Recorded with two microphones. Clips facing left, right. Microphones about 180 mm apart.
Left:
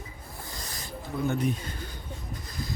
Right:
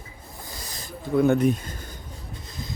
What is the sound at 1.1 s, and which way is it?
Speech, 90° right.